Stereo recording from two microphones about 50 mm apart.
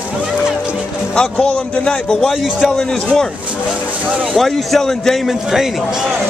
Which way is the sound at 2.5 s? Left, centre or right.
Centre.